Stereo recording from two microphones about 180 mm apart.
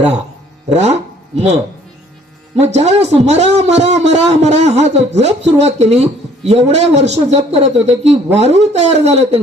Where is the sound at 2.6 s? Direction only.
40° right (ahead or behind).